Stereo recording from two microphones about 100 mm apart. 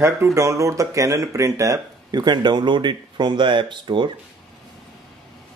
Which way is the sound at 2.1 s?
45° right (ahead or behind).